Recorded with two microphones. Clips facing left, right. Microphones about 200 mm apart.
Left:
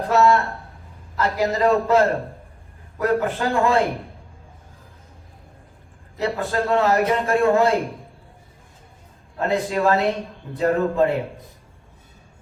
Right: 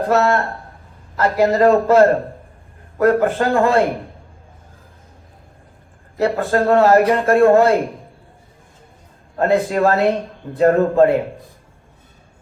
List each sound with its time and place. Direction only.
0.1 s a man's voice: 55° right (ahead or behind)
6.1 s a man's voice: 55° right (ahead or behind)
9.4 s a man's voice: 50° right (ahead or behind)